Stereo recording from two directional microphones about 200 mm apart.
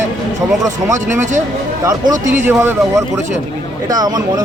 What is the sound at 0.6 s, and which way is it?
Speech, 15° right (ahead or behind).